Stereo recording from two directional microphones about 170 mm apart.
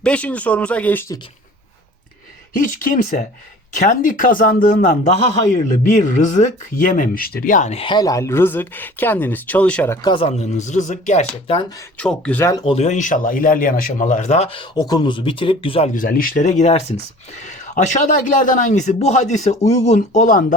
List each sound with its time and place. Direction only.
0.0 s speech: 5° left (ahead or behind)
2.5 s a man's voice: 50° left (ahead or behind); by 10.0 s 10° left (ahead or behind)
10.0 s speech: 30° left (ahead or behind)
11.9 s speech: 5° left (ahead or behind)
12.6 s speech: 40° left (ahead or behind)
15.9 s a man's voice: 55° left (ahead or behind)